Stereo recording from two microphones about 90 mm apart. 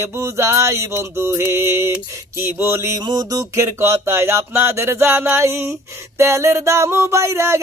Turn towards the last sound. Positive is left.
turn(degrees=-30)  # may be behind; listen again after turning